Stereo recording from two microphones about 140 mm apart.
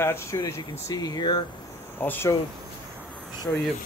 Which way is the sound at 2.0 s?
15° left (ahead or behind).